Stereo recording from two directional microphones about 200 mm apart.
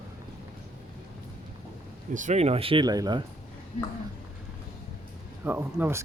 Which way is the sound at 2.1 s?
35° right (ahead or behind).